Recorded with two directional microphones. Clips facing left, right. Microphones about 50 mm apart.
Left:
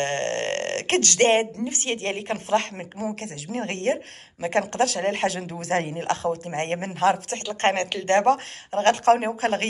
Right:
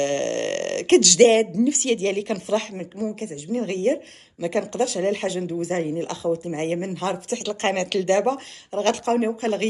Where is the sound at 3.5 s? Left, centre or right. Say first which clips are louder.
Right 3 dB; left.